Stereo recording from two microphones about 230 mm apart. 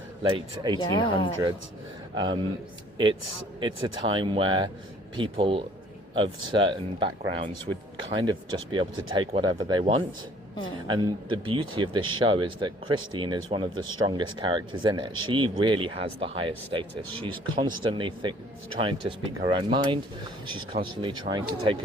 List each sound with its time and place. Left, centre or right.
0.2 s speech: right
0.8 s speech: left
2.1 s speech: centre
3.6 s speech: centre